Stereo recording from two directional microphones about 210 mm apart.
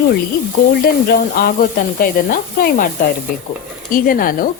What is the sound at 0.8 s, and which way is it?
A woman's voice, 45° left (ahead or behind).